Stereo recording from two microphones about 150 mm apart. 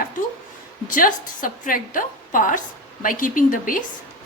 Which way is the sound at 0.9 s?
65° left (ahead or behind).